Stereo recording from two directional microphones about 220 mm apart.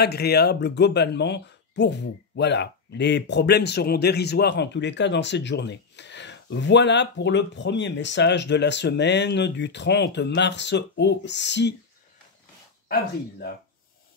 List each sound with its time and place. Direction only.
0.0 s speech: 45° left (ahead or behind)